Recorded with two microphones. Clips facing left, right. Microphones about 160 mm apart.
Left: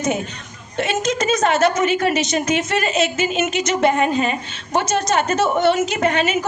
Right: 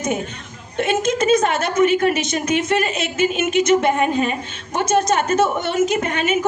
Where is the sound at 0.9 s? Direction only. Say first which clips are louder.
Right 3 dB; 55° right (ahead or behind).